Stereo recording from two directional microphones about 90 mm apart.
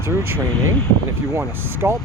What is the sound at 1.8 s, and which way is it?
Speech, 35° right (ahead or behind).